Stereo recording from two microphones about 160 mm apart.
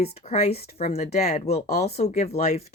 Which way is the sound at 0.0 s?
40° left (ahead or behind).